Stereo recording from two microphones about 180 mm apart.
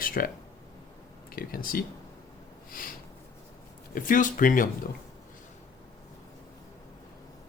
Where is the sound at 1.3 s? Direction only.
55° left (ahead or behind).